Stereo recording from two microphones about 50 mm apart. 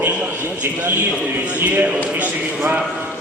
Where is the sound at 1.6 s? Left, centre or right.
Right.